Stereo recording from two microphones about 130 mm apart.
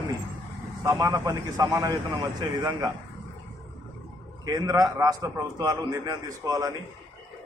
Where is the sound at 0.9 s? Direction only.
25° right (ahead or behind).